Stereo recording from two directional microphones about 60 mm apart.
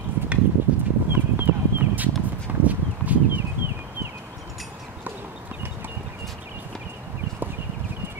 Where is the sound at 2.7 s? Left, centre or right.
Right.